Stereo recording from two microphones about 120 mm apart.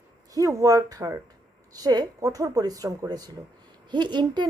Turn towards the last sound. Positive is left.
turn(degrees=-40)  # may be behind; listen again after turning